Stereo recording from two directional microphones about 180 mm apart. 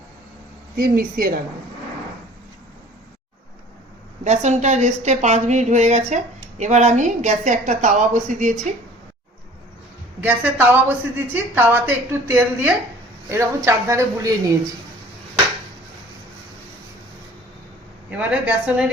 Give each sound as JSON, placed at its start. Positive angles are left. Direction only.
{"t": 0.8, "sound": "a woman's voice", "side_deg": -55}
{"t": 4.2, "sound": "a woman's voice", "side_deg": -40}
{"t": 10.2, "sound": "a woman's voice", "side_deg": -10}
{"t": 18.1, "sound": "a woman's voice", "side_deg": -5}